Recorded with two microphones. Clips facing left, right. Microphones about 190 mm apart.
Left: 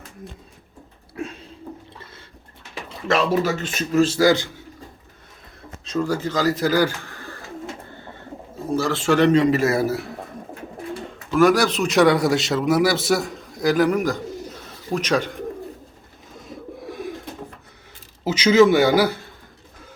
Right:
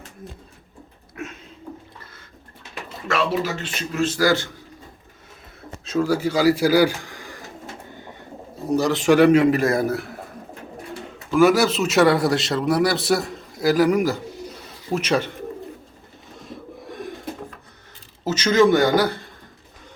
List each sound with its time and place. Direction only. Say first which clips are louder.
1.1 s a sound: left 3 dB; 30° left (ahead or behind)
3.1 s a man's voice: left 3 dB; 40° left (ahead or behind); by 4.4 s 20° left (ahead or behind)
5.8 s speech: right 2 dB; 5° right (ahead or behind)
7.9 s bird: even; 15° right (ahead or behind)
8.7 s a man's voice: right 3 dB; 15° right (ahead or behind); by 10.2 s centre (ahead or behind)
11.3 s a man's voice: right 1 dB; 10° right (ahead or behind)
16.4 s a sound: left 2 dB; centre (ahead or behind)
18.3 s a man's voice: left 2 dB; 10° left (ahead or behind)